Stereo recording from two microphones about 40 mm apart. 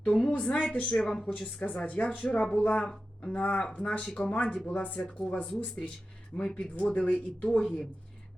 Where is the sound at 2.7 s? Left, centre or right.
Centre.